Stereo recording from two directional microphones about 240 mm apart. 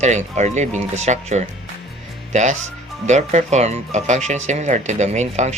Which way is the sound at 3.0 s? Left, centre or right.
Right.